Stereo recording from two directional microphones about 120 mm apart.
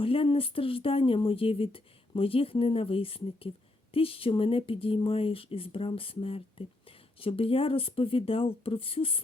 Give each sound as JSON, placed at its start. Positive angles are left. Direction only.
{"t": 0.0, "sound": "speech", "side_deg": 50}